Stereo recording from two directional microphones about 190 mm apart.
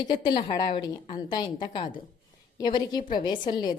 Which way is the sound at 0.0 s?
25° left (ahead or behind).